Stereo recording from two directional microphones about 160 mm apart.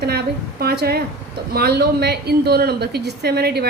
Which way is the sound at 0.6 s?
80° right.